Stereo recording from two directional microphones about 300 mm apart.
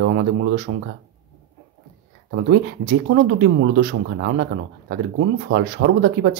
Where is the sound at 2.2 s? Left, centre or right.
Right.